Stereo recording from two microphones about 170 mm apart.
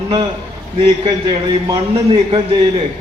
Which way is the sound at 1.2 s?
25° right (ahead or behind).